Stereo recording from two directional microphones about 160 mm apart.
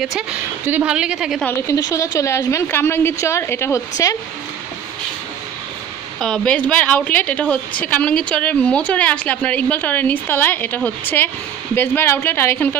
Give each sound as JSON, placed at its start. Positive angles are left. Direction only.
{"t": 0.0, "sound": "a woman's voice", "side_deg": -5}
{"t": 1.4, "sound": "a woman's voice", "side_deg": 15}
{"t": 6.2, "sound": "a woman's voice", "side_deg": 5}